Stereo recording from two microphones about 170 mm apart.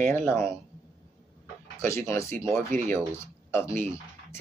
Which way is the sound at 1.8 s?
15° left (ahead or behind).